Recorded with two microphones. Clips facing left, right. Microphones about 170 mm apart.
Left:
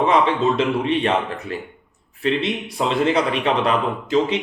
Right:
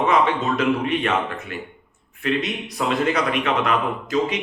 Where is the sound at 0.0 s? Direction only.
30° left (ahead or behind).